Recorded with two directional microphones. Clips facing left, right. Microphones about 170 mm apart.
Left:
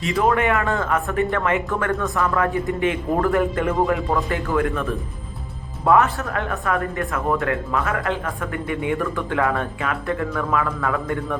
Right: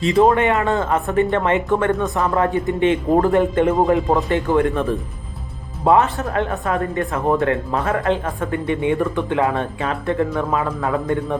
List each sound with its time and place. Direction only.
0.0 s speech: 25° right (ahead or behind)